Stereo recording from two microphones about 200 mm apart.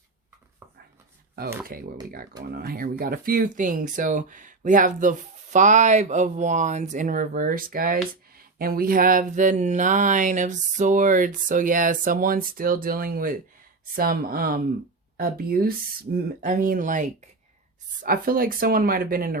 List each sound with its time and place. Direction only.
1.6 s speech: 45° right (ahead or behind)